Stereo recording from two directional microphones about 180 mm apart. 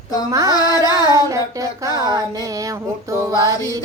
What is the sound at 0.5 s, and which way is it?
Music, 20° left (ahead or behind).